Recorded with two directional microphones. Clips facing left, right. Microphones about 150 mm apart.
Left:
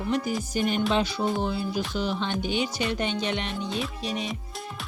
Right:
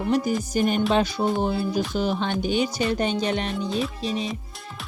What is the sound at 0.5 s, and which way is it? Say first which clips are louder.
Music: right 3 dB; 45° right (ahead or behind).